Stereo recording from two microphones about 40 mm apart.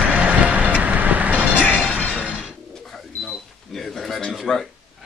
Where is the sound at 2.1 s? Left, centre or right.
Right.